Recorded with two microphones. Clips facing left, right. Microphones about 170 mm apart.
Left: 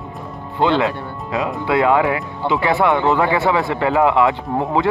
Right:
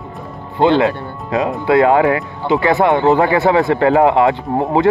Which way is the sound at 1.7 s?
40° right (ahead or behind).